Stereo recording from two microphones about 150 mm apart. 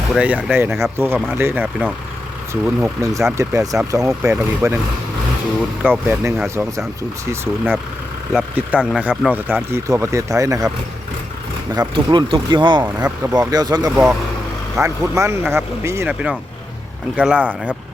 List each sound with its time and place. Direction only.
0.1 s speech: 5° right (ahead or behind)
5.8 s speech: 15° right (ahead or behind)
8.3 s speech: 5° right (ahead or behind); by 10.7 s 20° right (ahead or behind)
11.7 s speech: 30° right (ahead or behind)
12.8 s speech: 10° right (ahead or behind)
13.3 s speech: 25° right (ahead or behind)
13.9 s speech: 10° right (ahead or behind)
17.2 s speech: 10° right (ahead or behind)